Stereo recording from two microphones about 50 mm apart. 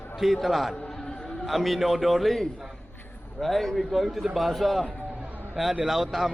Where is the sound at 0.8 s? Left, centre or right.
Centre.